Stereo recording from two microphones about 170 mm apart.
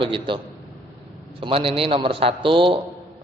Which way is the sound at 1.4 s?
35° right (ahead or behind).